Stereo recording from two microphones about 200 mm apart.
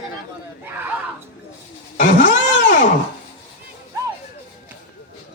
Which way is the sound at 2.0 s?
40° left (ahead or behind).